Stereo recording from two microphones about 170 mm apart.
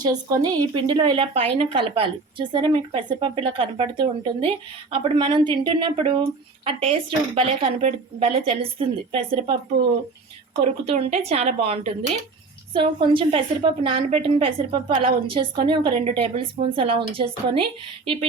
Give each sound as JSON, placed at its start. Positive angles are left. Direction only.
{"t": 0.0, "sound": "a woman's voice", "side_deg": -20}
{"t": 10.5, "sound": "a woman's voice", "side_deg": -40}